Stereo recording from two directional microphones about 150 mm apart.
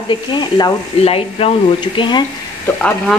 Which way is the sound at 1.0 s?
40° left (ahead or behind).